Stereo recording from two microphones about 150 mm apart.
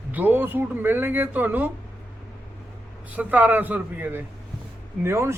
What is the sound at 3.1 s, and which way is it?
A man's voice, 10° right (ahead or behind).